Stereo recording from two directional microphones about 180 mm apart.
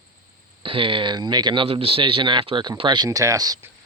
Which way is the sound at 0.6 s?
30° right (ahead or behind).